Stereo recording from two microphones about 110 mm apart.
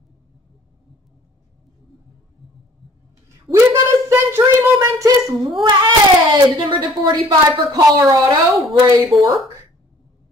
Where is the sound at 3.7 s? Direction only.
25° right (ahead or behind).